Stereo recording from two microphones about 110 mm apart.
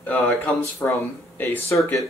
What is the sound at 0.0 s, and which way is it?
Speech, 15° left (ahead or behind).